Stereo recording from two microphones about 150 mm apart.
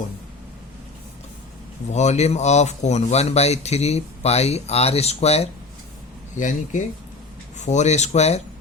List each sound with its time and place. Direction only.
1.9 s speech: 50° left (ahead or behind)
6.3 s speech: 55° left (ahead or behind)